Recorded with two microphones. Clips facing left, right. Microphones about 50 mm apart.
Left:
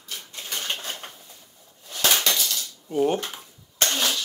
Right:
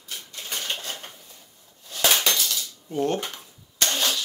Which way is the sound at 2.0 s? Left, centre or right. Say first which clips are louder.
Even; centre.